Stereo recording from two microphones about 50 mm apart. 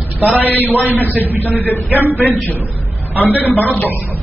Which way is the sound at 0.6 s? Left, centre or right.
Left.